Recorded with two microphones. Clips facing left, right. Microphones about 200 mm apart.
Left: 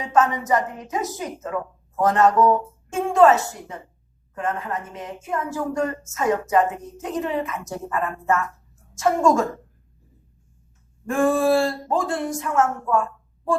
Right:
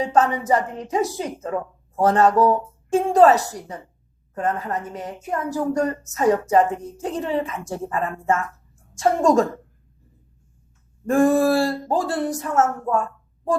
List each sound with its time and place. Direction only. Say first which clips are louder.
0.0 s a woman's voice: right 1 dB; 35° right (ahead or behind)
11.0 s a woman's voice: right 3 dB; 40° right (ahead or behind)